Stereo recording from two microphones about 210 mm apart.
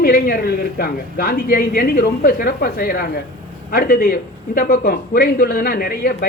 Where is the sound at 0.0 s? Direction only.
45° left (ahead or behind).